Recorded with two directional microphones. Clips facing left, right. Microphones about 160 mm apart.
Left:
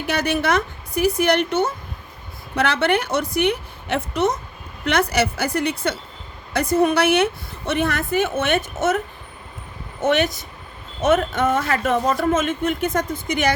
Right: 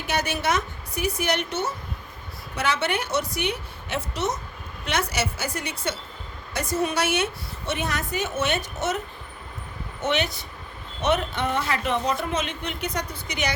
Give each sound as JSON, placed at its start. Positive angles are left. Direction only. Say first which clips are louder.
{"t": 0.1, "sound": "a woman's voice", "louder": "left 5 dB", "side_deg": 55}
{"t": 10.0, "sound": "speech", "louder": "left 6 dB", "side_deg": 50}